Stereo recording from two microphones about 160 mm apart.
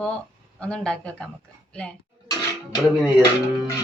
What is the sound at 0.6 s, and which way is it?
Speech, 5° left (ahead or behind).